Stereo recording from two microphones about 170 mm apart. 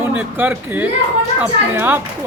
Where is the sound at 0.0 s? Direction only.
10° right (ahead or behind).